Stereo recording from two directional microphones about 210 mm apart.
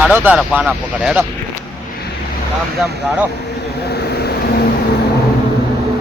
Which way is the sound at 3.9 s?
50° left (ahead or behind).